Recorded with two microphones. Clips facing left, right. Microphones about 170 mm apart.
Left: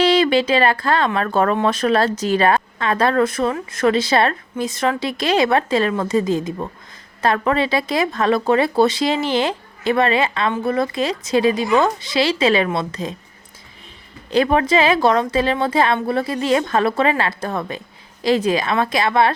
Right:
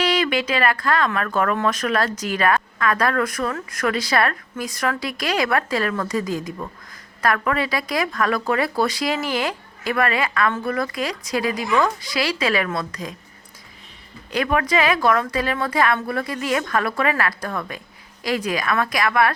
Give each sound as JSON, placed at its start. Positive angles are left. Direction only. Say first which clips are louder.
{"t": 0.0, "sound": "a woman's voice", "louder": "left 6 dB", "side_deg": 30}
{"t": 14.3, "sound": "a woman's voice", "louder": "left 5 dB", "side_deg": 30}